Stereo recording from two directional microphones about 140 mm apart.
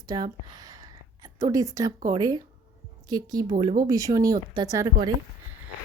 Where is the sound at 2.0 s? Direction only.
30° right (ahead or behind).